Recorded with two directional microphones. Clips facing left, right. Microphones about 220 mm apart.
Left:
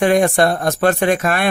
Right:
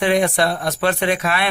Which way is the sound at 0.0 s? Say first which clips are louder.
Left 4 dB; 45° left (ahead or behind).